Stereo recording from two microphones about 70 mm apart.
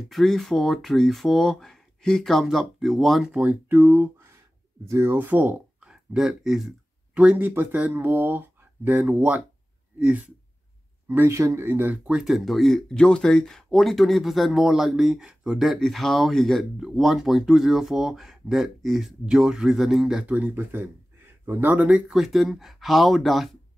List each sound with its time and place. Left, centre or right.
0.1 s speech: centre
3.6 s speech: right
4.8 s speech: right
5.1 s speech: right
5.8 s a sound: centre
7.3 s speech: right
11.1 s speech: right
12.1 s speech: centre
15.6 s speech: centre
20.2 s speech: right
22.1 s speech: centre